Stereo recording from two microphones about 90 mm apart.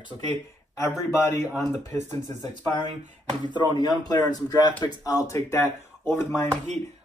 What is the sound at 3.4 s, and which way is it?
A man's voice, 50° left (ahead or behind).